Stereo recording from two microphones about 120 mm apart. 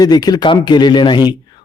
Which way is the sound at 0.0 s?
35° left (ahead or behind).